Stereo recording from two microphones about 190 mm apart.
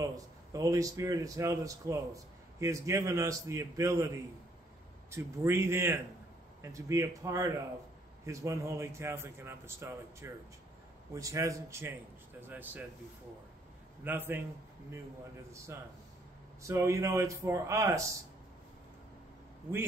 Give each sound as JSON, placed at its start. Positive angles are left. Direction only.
{"t": 0.0, "sound": "a man's voice", "side_deg": -20}
{"t": 5.1, "sound": "a man's voice", "side_deg": -15}
{"t": 14.0, "sound": "a man's voice", "side_deg": -10}
{"t": 15.5, "sound": "a man's voice", "side_deg": -15}